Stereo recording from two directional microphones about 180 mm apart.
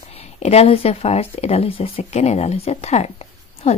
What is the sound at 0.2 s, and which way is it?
Speech, 35° left (ahead or behind).